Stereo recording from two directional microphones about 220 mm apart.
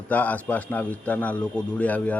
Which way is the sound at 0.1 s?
5° left (ahead or behind).